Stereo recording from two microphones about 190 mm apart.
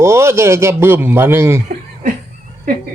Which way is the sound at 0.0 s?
15° right (ahead or behind).